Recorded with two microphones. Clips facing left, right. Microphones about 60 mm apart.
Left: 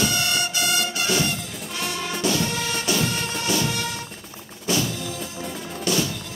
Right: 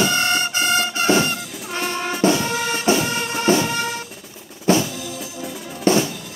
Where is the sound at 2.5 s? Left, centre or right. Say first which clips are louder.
Right 5 dB; centre.